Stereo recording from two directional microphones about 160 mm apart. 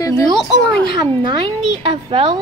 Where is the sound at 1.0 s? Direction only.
30° right (ahead or behind).